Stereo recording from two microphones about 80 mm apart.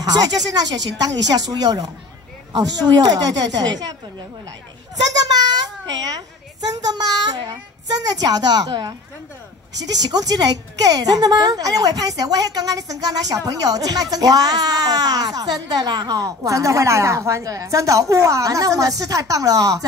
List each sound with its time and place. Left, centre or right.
0.0 s speech: right
3.0 s a child's voice: right
5.3 s a sound: right
6.7 s a child's voice: right
10.1 s speech: right